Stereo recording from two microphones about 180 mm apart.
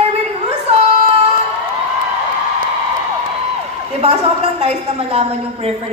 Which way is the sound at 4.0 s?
35° right (ahead or behind).